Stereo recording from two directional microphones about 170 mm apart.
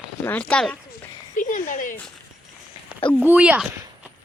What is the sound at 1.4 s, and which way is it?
Speech, 50° left (ahead or behind).